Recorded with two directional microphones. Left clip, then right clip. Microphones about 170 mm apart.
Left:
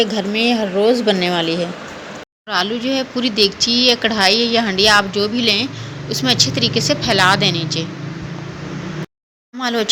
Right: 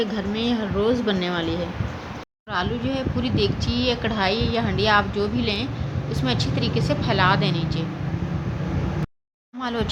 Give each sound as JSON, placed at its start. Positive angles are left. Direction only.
{"t": 0.0, "sound": "speech", "side_deg": 15}
{"t": 9.6, "sound": "speech", "side_deg": 20}